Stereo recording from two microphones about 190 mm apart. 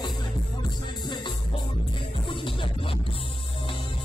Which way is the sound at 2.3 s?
25° left (ahead or behind).